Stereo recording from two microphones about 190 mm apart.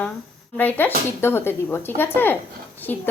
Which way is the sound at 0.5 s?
10° left (ahead or behind).